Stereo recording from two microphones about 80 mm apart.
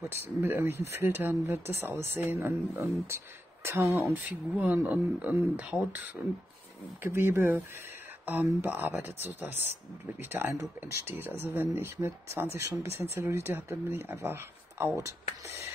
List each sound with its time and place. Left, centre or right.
0.4 s speech: right
4.3 s speech: centre; by 15.7 s right